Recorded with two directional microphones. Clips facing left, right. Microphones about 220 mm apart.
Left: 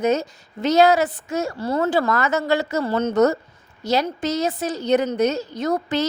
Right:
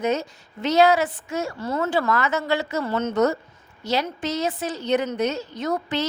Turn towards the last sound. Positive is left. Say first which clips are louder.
# left 3 dB
turn(degrees=40)  # may be behind; listen again after turning